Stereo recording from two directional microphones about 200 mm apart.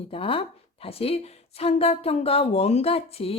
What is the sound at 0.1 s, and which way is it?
A woman's voice, 25° left (ahead or behind).